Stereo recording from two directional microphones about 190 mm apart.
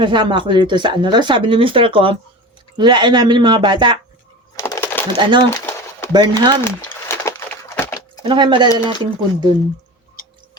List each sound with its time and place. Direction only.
0.0 s speech: 25° right (ahead or behind)
4.5 s a sound: 15° left (ahead or behind)
5.1 s speech: 25° right (ahead or behind)
5.5 s pigeon: 10° left (ahead or behind)
6.1 s speech: 20° right (ahead or behind)
7.1 s a sound: 15° left (ahead or behind)
8.2 s speech: 25° right (ahead or behind)